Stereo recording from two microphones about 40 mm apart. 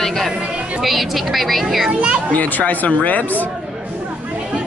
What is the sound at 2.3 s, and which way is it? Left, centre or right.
Speech, left.